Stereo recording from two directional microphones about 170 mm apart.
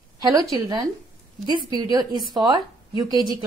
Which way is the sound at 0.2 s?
20° right (ahead or behind).